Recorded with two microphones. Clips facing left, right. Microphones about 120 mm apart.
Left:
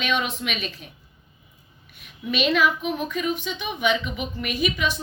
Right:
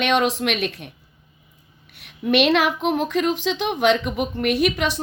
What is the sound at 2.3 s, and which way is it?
A woman's voice, 70° right (ahead or behind).